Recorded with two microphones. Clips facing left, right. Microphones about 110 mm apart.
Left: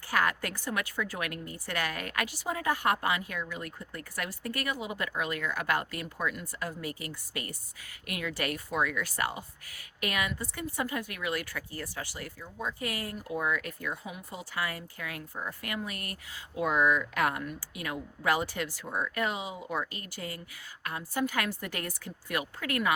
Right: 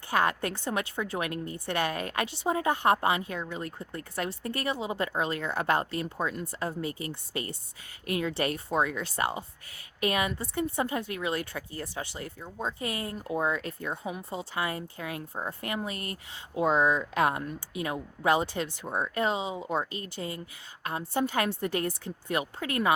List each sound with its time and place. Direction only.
0.1 s a woman's voice: 25° right (ahead or behind)